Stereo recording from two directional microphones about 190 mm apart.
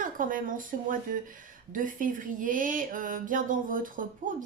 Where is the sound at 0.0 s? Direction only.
45° right (ahead or behind).